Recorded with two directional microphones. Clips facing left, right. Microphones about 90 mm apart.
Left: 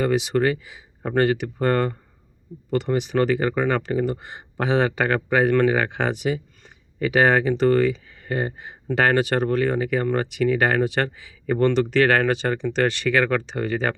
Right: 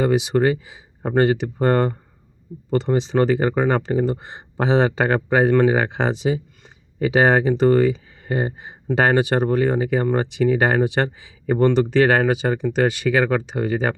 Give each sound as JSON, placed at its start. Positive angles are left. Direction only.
{"t": 0.0, "sound": "speech", "side_deg": -20}